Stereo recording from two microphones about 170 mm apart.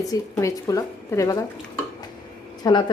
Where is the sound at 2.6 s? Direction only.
20° left (ahead or behind).